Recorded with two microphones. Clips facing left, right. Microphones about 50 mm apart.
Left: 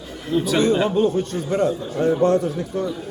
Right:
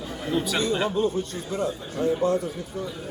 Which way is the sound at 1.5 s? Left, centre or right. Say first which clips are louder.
Left 9 dB; left.